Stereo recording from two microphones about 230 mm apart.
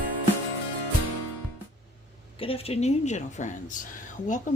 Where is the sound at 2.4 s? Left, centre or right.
Left.